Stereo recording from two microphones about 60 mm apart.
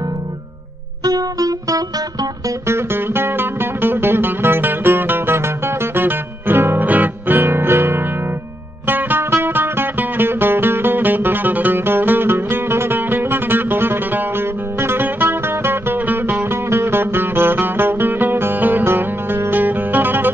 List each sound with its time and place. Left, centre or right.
1.0 s music: right
2.7 s music: right